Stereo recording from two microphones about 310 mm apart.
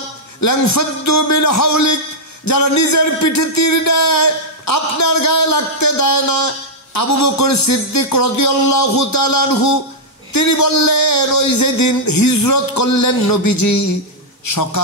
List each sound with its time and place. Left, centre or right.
0.4 s a man's voice: left